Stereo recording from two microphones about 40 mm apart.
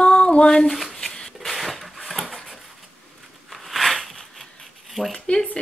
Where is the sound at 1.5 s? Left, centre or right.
Centre.